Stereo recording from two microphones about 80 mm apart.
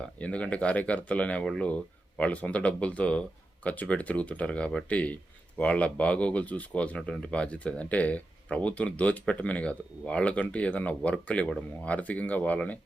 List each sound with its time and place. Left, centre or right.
0.0 s speech: centre